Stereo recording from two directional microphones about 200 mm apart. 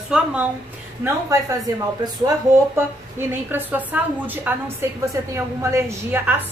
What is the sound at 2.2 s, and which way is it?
A woman's voice, 10° right (ahead or behind).